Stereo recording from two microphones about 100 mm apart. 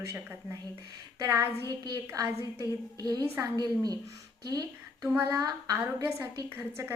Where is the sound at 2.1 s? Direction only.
30° right (ahead or behind).